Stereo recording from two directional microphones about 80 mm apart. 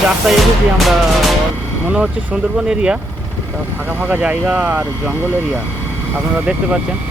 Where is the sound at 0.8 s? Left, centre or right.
Centre.